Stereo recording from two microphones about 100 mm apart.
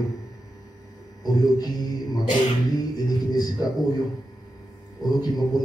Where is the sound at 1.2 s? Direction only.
40° left (ahead or behind).